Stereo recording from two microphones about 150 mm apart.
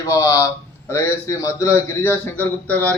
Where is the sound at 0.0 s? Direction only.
20° left (ahead or behind).